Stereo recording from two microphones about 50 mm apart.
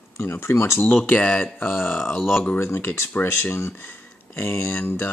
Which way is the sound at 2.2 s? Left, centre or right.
Centre.